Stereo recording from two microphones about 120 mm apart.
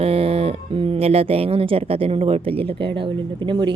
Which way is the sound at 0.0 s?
55° right (ahead or behind).